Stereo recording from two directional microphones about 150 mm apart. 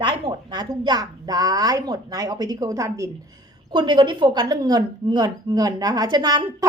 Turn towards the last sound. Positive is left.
turn(degrees=-25)  # may be behind; listen again after turning